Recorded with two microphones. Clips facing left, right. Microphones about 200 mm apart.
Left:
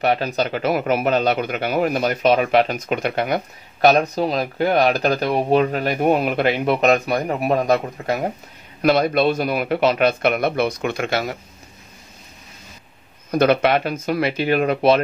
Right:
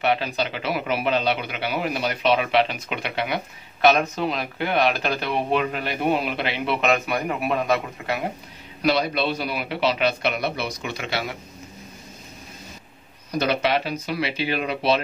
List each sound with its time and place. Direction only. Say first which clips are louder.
0.0 s speech: left 3 dB; 40° left (ahead or behind)
13.3 s speech: left 6 dB; 55° left (ahead or behind)